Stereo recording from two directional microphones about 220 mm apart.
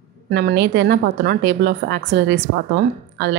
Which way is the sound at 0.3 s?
50° right (ahead or behind).